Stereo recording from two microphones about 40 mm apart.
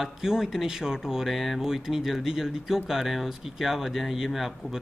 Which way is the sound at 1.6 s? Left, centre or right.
Centre.